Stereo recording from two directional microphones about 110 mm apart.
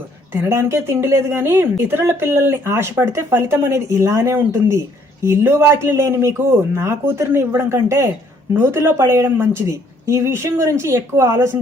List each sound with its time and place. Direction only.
0.4 s speech: 25° right (ahead or behind)